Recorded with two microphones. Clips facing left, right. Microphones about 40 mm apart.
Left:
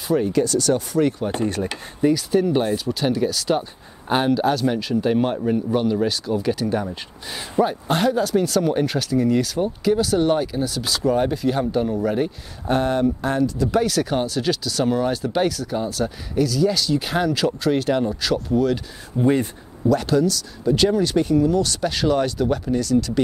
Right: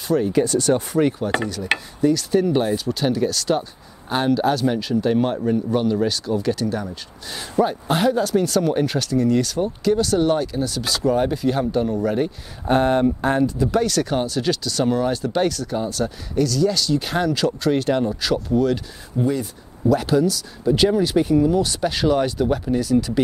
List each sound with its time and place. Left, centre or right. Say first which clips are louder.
0.3 s speech: right 1 dB; right
1.2 s speech: right 3 dB; centre
1.7 s speech: right 10 dB; right
2.3 s speech: even; centre
7.6 s speech: right 1 dB; centre
12.6 s speech: right 2 dB; right
13.7 s speech: even; centre
19.2 s speech: left 4 dB; left
19.9 s speech: right 1 dB; centre